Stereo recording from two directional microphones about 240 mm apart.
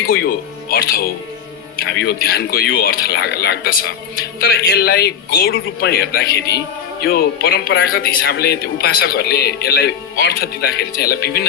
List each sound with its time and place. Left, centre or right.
0.1 s a man's voice: left